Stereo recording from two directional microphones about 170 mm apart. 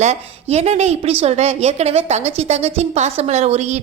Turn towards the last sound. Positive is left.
turn(degrees=-40)  # may be behind; listen again after turning